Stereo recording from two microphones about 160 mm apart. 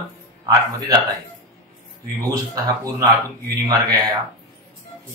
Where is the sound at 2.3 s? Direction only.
20° right (ahead or behind).